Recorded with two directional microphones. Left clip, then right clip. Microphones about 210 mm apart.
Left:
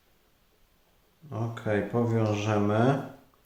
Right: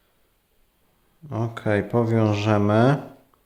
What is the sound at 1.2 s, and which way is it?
Speech, 50° right (ahead or behind).